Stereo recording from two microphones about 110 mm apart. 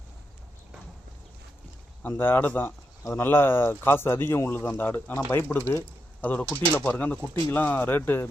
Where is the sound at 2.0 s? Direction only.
20° left (ahead or behind).